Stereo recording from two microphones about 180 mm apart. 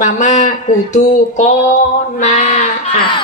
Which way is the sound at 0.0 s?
40° left (ahead or behind).